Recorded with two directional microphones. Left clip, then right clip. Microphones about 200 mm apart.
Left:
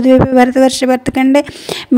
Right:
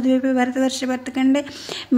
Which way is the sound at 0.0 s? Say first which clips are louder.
Left 11 dB; 45° left (ahead or behind).